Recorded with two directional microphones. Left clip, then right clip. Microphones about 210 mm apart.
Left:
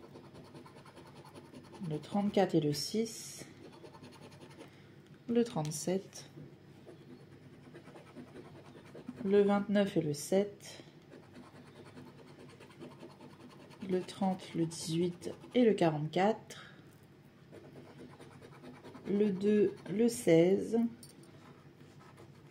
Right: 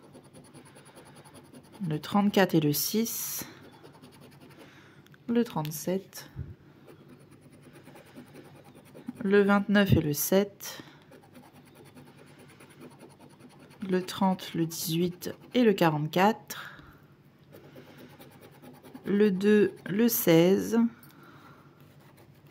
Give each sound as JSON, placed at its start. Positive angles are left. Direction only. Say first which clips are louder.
{"t": 1.9, "sound": "speech", "louder": "right 8 dB", "side_deg": -35}
{"t": 5.3, "sound": "speech", "louder": "right 3 dB", "side_deg": -25}
{"t": 9.3, "sound": "speech", "louder": "right 5 dB", "side_deg": -35}
{"t": 13.8, "sound": "speech", "louder": "right 7 dB", "side_deg": -35}
{"t": 19.0, "sound": "speech", "louder": "right 7 dB", "side_deg": -35}